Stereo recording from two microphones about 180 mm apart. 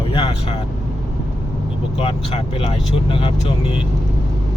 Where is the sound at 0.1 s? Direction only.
30° left (ahead or behind).